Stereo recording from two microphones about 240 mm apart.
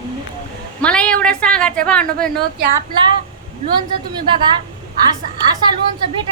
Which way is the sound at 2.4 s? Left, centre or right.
Right.